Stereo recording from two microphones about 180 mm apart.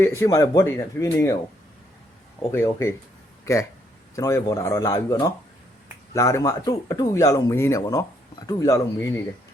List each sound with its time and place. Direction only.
0.0 s speech: 15° left (ahead or behind)
2.5 s speech: 15° left (ahead or behind)
6.1 s speech: 20° left (ahead or behind)